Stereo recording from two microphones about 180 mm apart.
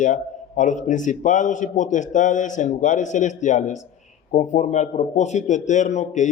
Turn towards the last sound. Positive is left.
turn(degrees=40)  # may be behind; listen again after turning